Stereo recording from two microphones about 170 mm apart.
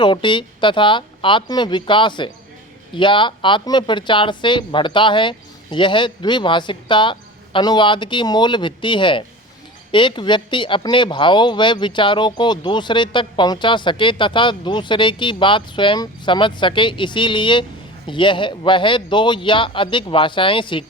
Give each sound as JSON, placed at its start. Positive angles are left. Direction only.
{"t": 0.0, "sound": "speech", "side_deg": 30}